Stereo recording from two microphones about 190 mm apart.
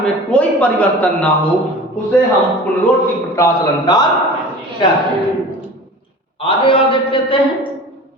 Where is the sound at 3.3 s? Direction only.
20° left (ahead or behind).